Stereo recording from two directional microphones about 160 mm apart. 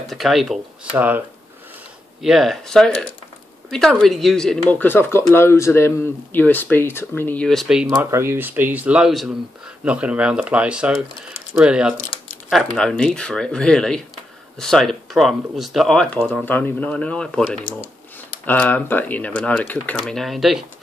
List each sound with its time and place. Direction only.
0.0 s speech: centre (ahead or behind)
2.2 s speech: centre (ahead or behind)
7.9 s speech: 15° right (ahead or behind)